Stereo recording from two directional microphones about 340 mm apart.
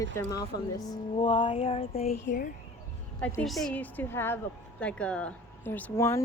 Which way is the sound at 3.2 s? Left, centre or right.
Centre.